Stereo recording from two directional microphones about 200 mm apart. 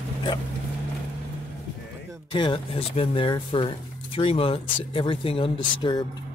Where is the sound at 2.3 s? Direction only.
25° left (ahead or behind).